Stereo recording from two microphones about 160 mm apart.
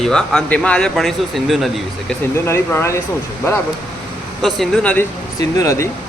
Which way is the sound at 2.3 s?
15° left (ahead or behind).